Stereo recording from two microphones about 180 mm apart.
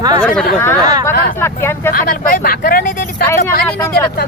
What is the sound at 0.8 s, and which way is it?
Speech, 20° right (ahead or behind).